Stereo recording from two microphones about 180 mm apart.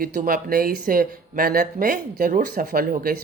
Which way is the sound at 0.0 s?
50° right (ahead or behind).